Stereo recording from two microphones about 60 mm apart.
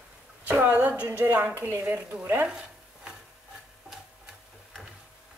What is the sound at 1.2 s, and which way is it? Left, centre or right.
Speech, right.